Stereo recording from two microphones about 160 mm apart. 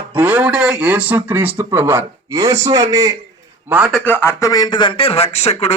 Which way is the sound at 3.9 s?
10° left (ahead or behind).